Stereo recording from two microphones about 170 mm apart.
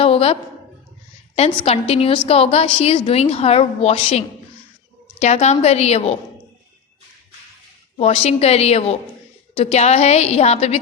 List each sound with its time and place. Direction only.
0.0 s a sound: 35° left (ahead or behind)
1.4 s a woman's voice: 35° left (ahead or behind)
5.2 s a woman's voice: 40° left (ahead or behind)
7.9 s a woman's voice: 35° left (ahead or behind)